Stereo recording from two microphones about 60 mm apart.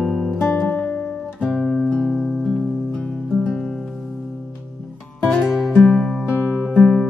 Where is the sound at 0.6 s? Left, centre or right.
Centre.